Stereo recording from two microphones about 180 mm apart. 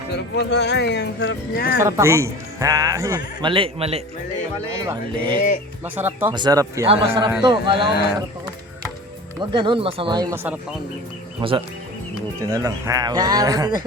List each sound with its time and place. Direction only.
0.3 s speech: 75° left (ahead or behind)
1.8 s speech: 15° right (ahead or behind)
3.5 s speech: 30° right (ahead or behind)
4.8 s speech: 20° right (ahead or behind)
6.3 s speech: 20° right (ahead or behind)
6.8 s speech: 30° right (ahead or behind)
9.4 s speech: 25° right (ahead or behind)
10.3 s speech: 10° right (ahead or behind)
11.3 s speech: 30° right (ahead or behind)
12.4 s speech: 15° right (ahead or behind)